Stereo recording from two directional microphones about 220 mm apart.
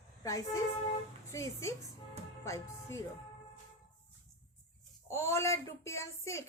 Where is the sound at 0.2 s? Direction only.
15° left (ahead or behind).